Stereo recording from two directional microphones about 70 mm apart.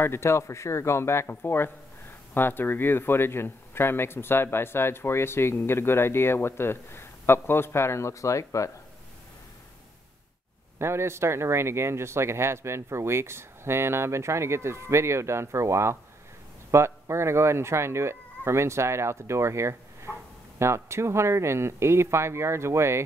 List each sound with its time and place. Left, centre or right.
0.0 s speech: left
10.8 s speech: right